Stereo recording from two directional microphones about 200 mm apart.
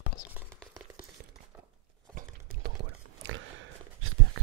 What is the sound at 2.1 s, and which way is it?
Clip-clop, 45° right (ahead or behind).